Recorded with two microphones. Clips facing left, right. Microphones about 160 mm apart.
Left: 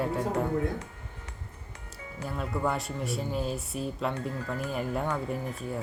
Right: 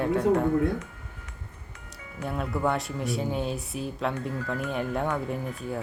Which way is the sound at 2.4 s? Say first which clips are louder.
Right 3 dB; centre (ahead or behind).